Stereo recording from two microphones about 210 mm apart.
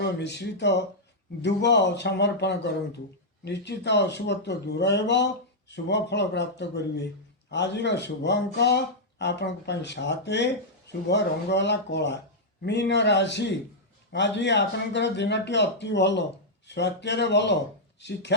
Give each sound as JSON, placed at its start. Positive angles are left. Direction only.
{"t": 0.0, "sound": "speech", "side_deg": 55}